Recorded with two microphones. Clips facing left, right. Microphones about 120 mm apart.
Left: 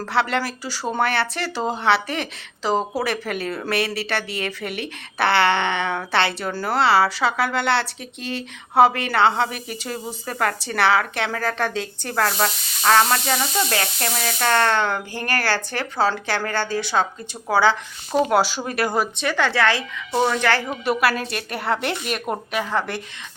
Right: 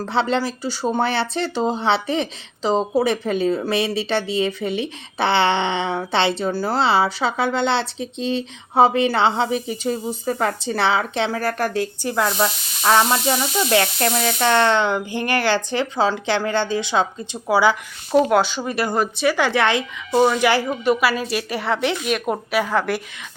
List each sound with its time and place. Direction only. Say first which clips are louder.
0.0 s a woman's voice: right 2 dB; 20° right (ahead or behind)
11.3 s speech: right 2 dB; 10° right (ahead or behind)
12.9 s a woman's voice: right 1 dB; 20° right (ahead or behind)
18.1 s a woman's voice: right 3 dB; 5° left (ahead or behind); by 19.8 s 20° right (ahead or behind)
20.1 s speech: right 4 dB; 5° right (ahead or behind)
20.8 s a woman's voice: even; centre (ahead or behind)